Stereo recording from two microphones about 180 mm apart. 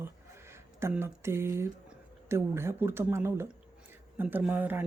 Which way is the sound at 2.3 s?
15° right (ahead or behind).